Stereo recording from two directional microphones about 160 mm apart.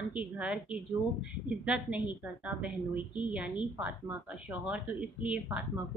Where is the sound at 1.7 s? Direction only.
10° right (ahead or behind).